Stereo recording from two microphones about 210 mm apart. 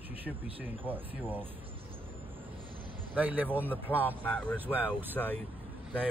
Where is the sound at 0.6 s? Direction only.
10° right (ahead or behind).